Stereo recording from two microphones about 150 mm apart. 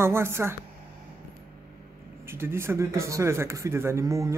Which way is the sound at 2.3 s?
15° right (ahead or behind).